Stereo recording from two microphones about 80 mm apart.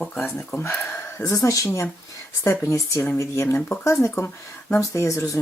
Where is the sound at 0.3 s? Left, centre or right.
Left.